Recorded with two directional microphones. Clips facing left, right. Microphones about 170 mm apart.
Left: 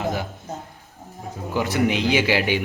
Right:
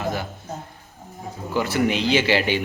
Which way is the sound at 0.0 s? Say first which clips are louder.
Left 1 dB; 20° left (ahead or behind).